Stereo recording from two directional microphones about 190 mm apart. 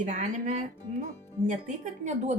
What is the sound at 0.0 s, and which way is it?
Speech, 40° right (ahead or behind).